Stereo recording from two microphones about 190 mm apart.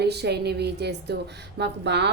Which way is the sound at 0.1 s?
60° right (ahead or behind).